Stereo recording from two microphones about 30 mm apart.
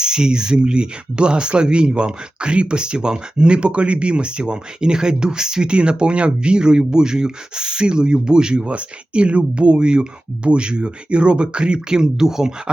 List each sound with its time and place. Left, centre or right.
0.0 s speech: right
8.6 s speech: right